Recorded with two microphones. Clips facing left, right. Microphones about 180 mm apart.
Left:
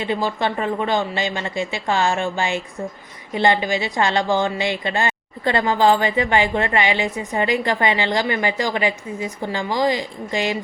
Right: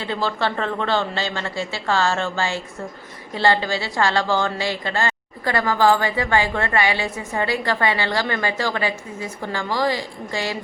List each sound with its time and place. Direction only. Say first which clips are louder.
0.0 s speech: left 2 dB; 15° left (ahead or behind)